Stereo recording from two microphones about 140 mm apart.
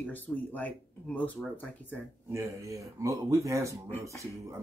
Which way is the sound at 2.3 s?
20° right (ahead or behind).